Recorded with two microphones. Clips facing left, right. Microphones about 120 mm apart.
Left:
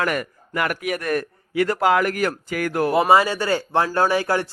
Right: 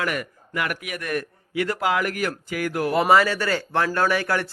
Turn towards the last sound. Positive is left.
turn(degrees=30)  # may be behind; listen again after turning